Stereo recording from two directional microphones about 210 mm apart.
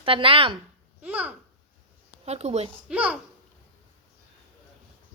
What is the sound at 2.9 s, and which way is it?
Speech, 5° right (ahead or behind).